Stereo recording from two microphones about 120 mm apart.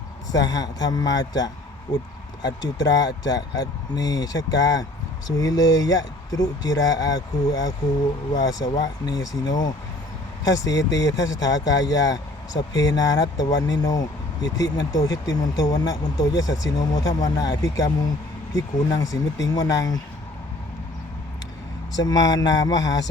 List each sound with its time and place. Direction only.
0.3 s speech: 30° left (ahead or behind)
22.0 s speech: 35° left (ahead or behind)